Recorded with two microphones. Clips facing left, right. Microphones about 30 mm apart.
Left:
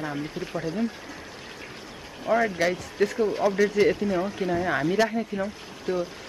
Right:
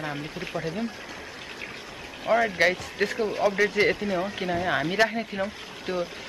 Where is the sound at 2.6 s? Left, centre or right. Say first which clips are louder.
Right 1 dB; right.